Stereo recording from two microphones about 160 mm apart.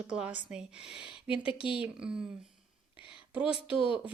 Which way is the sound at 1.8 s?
5° right (ahead or behind).